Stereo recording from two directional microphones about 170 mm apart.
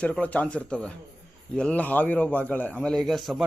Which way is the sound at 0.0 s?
10° left (ahead or behind).